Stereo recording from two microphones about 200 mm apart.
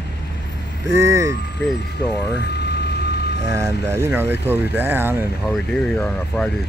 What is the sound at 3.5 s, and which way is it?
Speech, 15° right (ahead or behind).